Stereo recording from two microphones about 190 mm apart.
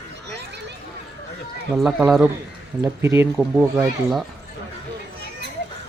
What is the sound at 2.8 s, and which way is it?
Speech, 15° right (ahead or behind).